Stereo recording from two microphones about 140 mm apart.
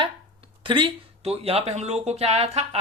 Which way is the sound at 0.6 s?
35° right (ahead or behind).